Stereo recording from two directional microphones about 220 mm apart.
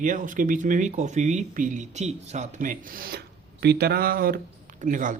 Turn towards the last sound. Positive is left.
turn(degrees=-35)  # may be behind; listen again after turning